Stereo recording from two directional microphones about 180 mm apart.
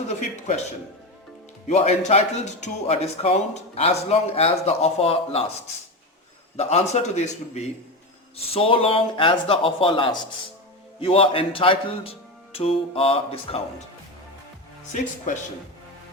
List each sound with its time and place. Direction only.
0.1 s speech: 40° left (ahead or behind)
1.6 s speech: 40° left (ahead or behind)
6.6 s speech: 35° left (ahead or behind)
15.3 s speech: 45° left (ahead or behind)